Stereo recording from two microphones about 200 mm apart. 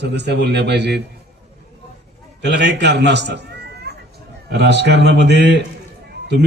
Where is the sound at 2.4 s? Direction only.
60° right (ahead or behind).